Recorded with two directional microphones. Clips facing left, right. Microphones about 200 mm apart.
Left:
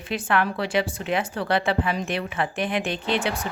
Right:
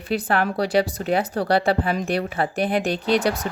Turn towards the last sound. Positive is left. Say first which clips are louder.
# right 5 dB
turn(degrees=-40)  # may be behind; listen again after turning